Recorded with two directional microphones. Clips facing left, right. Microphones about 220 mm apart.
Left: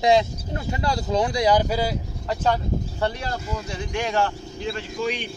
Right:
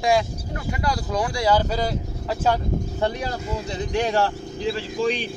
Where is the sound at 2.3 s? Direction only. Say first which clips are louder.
Right 1 dB; 5° right (ahead or behind).